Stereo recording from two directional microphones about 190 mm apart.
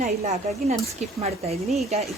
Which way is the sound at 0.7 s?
35° right (ahead or behind).